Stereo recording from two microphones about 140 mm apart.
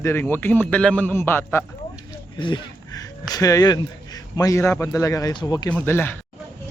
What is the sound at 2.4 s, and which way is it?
A man's voice, 35° left (ahead or behind).